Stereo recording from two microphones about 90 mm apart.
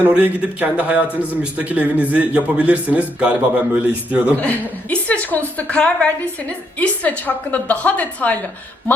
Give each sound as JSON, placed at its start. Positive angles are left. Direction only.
{"t": 0.0, "sound": "a man's voice", "side_deg": -20}
{"t": 4.4, "sound": "a woman's voice", "side_deg": 15}